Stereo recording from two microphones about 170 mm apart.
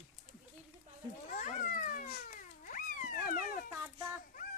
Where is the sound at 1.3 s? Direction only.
50° left (ahead or behind).